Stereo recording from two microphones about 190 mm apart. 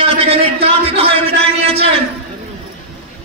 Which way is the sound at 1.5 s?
30° right (ahead or behind).